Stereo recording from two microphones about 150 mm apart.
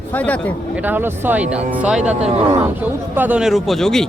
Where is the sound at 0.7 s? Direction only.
10° right (ahead or behind).